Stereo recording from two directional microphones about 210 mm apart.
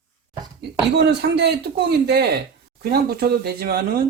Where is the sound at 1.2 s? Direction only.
50° right (ahead or behind).